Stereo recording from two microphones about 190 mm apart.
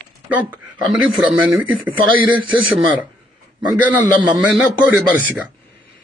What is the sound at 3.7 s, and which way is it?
Speech, 10° right (ahead or behind).